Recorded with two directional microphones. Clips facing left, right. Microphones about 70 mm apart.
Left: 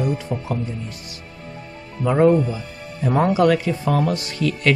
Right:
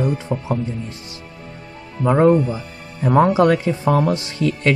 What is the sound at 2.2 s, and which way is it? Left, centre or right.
Speech, right.